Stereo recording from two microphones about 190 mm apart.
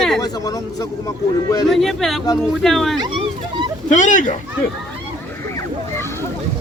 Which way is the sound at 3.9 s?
40° left (ahead or behind).